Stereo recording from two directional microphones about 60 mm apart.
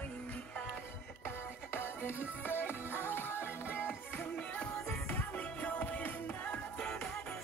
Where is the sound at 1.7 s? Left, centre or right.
Left.